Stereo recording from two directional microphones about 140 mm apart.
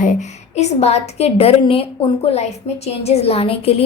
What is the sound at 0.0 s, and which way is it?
A woman's voice, 60° left (ahead or behind).